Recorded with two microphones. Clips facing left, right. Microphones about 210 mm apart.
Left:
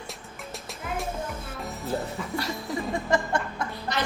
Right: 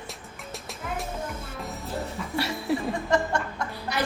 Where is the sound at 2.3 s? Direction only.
70° right (ahead or behind).